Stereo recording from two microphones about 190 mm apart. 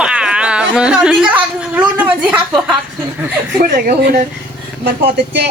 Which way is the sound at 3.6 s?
50° right (ahead or behind).